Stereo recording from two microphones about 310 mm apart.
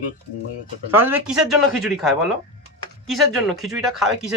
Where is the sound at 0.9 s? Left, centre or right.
Centre.